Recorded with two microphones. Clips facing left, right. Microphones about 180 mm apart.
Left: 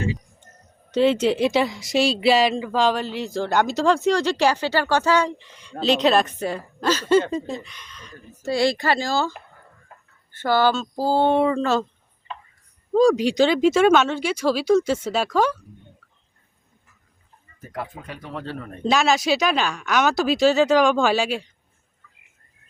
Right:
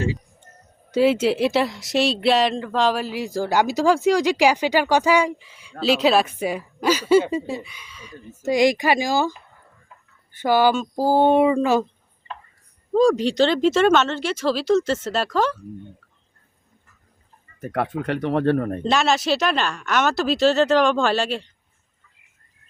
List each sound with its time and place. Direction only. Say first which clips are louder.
0.9 s speech: right 1 dB; 5° right (ahead or behind)
8.3 s speech: right 3 dB; 15° right (ahead or behind)
9.9 s a sound: left 2 dB; 50° left (ahead or behind)
10.3 s speech: right 2 dB; 15° right (ahead or behind)
12.9 s speech: even; centre (ahead or behind)
17.6 s speech: right 8 dB; 65° right (ahead or behind); by 18.8 s 50° right (ahead or behind)
18.8 s speech: even; 5° left (ahead or behind)
20.1 s speech: even; 10° left (ahead or behind)